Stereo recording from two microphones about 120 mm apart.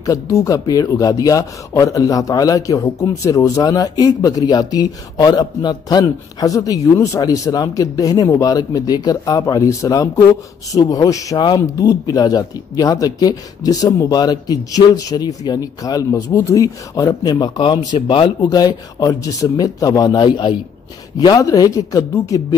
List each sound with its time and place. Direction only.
0.0 s speech: 25° left (ahead or behind)